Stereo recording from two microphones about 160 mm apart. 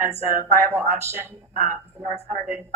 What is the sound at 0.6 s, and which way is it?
Speech, 10° right (ahead or behind).